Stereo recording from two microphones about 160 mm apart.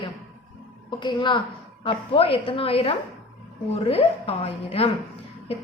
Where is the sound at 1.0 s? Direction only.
30° left (ahead or behind).